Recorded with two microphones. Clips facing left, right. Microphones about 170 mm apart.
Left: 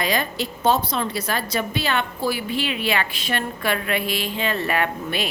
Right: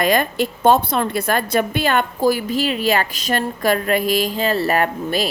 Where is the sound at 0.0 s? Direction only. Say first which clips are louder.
Right 6 dB; 50° right (ahead or behind).